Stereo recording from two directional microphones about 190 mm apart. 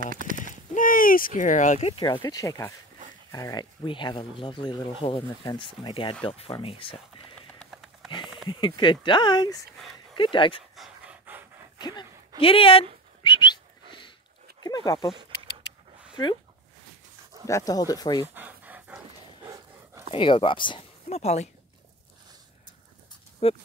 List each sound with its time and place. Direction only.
0.0 s a sound: 45° right (ahead or behind)
0.7 s speech: 45° left (ahead or behind); by 2.1 s 30° left (ahead or behind)
2.1 s speech: 20° left (ahead or behind)
7.5 s sniff: centre (ahead or behind)
8.5 s speech: 25° left (ahead or behind)
10.8 s pant: 10° right (ahead or behind)
11.8 s speech: 20° left (ahead or behind)
13.2 s whistling: 25° left (ahead or behind)
14.6 s speech: 20° left (ahead or behind)
17.5 s speech: 15° left (ahead or behind)
18.2 s dog: 10° right (ahead or behind)
20.1 s speech: 25° left (ahead or behind)
23.4 s speech: 30° left (ahead or behind)